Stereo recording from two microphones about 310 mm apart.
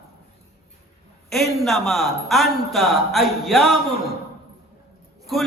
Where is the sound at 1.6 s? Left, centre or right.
Centre.